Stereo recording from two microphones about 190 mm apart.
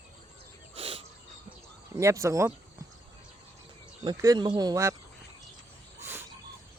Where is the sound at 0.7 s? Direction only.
30° right (ahead or behind).